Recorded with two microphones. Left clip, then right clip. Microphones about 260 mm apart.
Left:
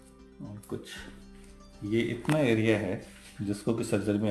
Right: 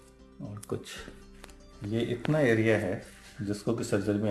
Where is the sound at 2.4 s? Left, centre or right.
Centre.